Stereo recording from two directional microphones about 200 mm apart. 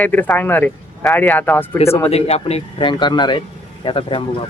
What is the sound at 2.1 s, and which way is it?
A man's voice, 30° left (ahead or behind).